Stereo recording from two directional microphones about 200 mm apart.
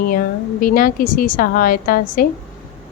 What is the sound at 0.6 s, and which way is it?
A woman's voice, 45° left (ahead or behind).